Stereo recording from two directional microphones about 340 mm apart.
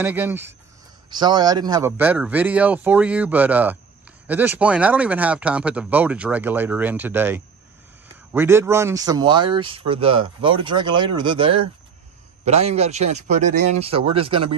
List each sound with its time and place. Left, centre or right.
0.0 s speech: centre